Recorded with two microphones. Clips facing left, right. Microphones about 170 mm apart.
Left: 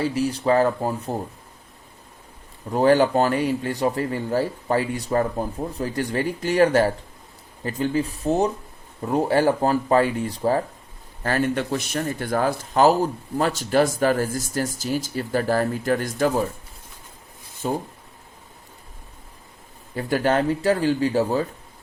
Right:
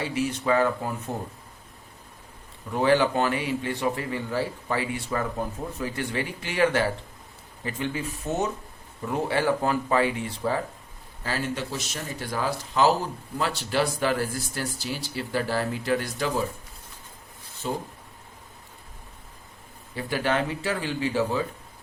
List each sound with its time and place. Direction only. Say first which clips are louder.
0.0 s a man's voice: left 5 dB; 40° left (ahead or behind)
2.7 s a man's voice: left 5 dB; 45° left (ahead or behind)
11.2 s speech: left 7 dB; 55° left (ahead or behind)
17.6 s speech: left 5 dB; 50° left (ahead or behind)
20.0 s a man's voice: left 5 dB; 45° left (ahead or behind)